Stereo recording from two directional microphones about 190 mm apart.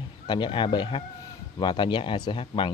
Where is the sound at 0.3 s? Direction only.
25° left (ahead or behind).